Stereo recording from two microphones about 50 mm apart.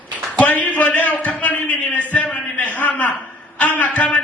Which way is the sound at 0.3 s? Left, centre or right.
Left.